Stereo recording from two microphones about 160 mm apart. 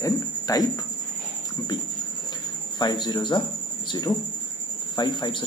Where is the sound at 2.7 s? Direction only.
25° left (ahead or behind).